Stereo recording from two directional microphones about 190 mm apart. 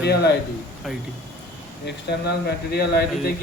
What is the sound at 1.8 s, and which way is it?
Speech, 60° left (ahead or behind).